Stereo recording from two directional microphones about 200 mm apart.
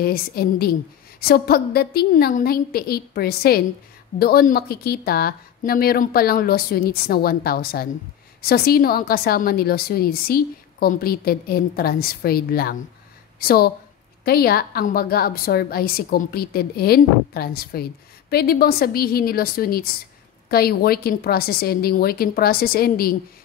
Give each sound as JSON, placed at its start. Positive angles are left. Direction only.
{"t": 0.0, "sound": "a woman's voice", "side_deg": 50}